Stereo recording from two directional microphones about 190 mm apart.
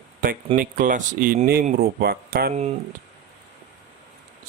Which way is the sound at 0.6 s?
45° right (ahead or behind).